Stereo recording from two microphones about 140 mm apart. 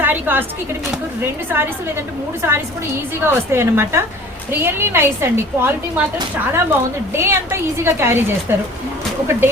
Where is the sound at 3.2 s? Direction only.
15° right (ahead or behind).